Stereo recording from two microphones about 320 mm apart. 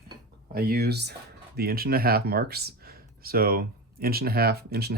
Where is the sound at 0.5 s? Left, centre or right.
Right.